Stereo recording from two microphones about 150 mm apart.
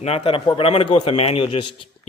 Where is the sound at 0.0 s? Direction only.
40° left (ahead or behind).